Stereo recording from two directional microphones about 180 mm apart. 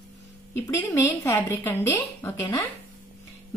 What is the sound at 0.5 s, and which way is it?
Speech, 15° left (ahead or behind).